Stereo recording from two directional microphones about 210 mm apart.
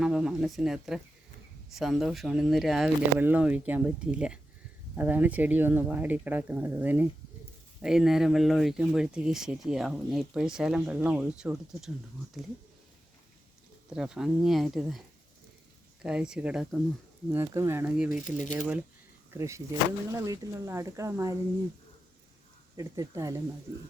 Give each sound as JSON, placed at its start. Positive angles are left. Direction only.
{"t": 0.0, "sound": "speech", "side_deg": -5}
{"t": 13.9, "sound": "speech", "side_deg": -5}
{"t": 16.0, "sound": "speech", "side_deg": -5}
{"t": 17.3, "sound": "speech", "side_deg": -15}
{"t": 18.3, "sound": "speech", "side_deg": 35}
{"t": 19.3, "sound": "speech", "side_deg": -15}
{"t": 22.8, "sound": "speech", "side_deg": -15}